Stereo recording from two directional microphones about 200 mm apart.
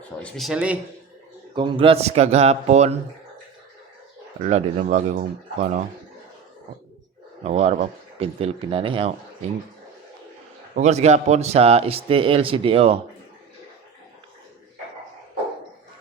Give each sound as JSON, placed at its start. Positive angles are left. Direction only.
{"t": 0.2, "sound": "speech", "side_deg": 5}
{"t": 1.5, "sound": "speech", "side_deg": -25}
{"t": 4.4, "sound": "speech", "side_deg": -35}
{"t": 7.4, "sound": "speech", "side_deg": -30}
{"t": 10.8, "sound": "speech", "side_deg": -35}